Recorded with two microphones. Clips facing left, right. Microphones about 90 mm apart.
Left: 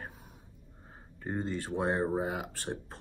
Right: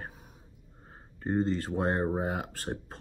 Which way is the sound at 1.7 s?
45° right (ahead or behind).